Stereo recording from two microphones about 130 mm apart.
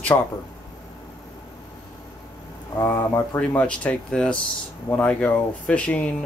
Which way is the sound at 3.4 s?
10° left (ahead or behind).